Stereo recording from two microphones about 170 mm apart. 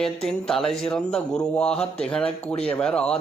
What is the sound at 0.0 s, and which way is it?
Speech, 5° left (ahead or behind).